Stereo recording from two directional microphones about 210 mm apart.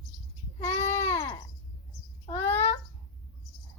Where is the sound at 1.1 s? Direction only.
10° left (ahead or behind).